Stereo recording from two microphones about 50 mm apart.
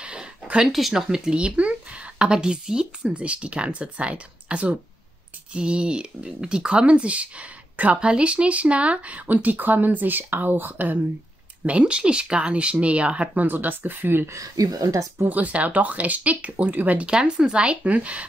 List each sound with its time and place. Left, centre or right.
0.0 s a sound: right
0.7 s speech: centre; by 11.0 s right
11.6 s speech: right
13.5 s speech: right
14.9 s speech: right
15.2 s speech: right
17.0 s speech: centre